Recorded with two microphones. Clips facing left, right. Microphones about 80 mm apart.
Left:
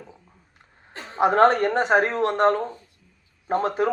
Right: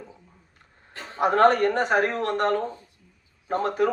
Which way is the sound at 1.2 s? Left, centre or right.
Left.